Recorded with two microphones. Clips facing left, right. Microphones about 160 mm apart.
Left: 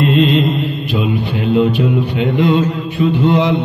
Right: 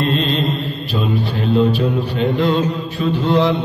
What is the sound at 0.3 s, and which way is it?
Mantra, 75° left (ahead or behind).